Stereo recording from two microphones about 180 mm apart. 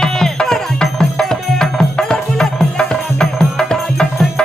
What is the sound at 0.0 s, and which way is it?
Music, 5° left (ahead or behind).